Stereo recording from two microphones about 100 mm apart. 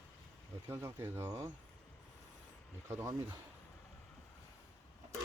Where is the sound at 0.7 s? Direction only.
25° right (ahead or behind).